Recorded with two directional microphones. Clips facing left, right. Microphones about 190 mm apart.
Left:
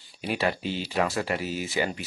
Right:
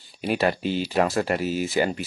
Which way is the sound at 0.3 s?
45° right (ahead or behind).